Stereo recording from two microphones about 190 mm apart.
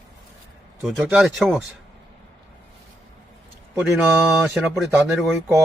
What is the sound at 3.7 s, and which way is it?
Speech, 5° right (ahead or behind).